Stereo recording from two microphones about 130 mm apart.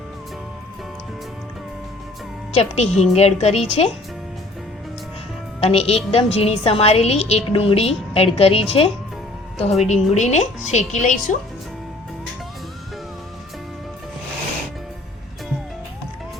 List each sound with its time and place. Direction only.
2.6 s speech: 55° left (ahead or behind)
5.5 s a woman's voice: 50° left (ahead or behind)
9.8 s a woman's voice: 60° left (ahead or behind)